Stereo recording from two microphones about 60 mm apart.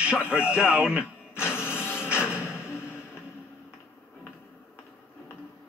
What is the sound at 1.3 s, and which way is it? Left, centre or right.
Printer, left.